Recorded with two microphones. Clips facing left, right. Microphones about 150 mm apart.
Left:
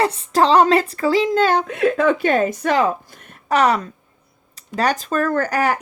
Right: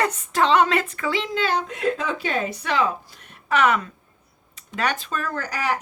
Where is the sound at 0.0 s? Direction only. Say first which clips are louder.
Left 5 dB; 30° left (ahead or behind).